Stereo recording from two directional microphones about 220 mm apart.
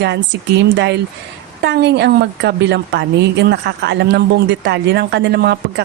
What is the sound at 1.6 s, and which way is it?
A woman's voice, 50° right (ahead or behind).